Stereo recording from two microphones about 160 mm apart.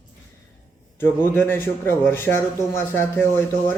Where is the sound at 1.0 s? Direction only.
15° left (ahead or behind).